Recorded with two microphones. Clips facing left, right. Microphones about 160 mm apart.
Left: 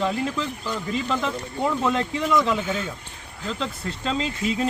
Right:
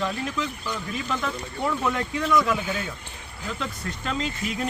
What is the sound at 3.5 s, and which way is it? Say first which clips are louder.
Speech: left 3 dB; 30° left (ahead or behind).